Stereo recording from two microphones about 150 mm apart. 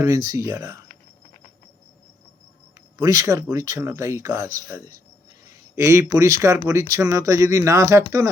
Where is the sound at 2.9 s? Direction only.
20° right (ahead or behind).